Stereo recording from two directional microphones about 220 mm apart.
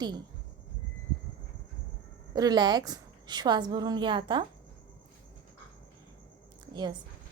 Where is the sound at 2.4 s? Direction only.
20° right (ahead or behind).